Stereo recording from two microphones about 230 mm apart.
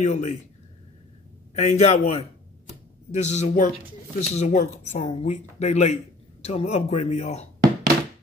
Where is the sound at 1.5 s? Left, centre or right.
Left.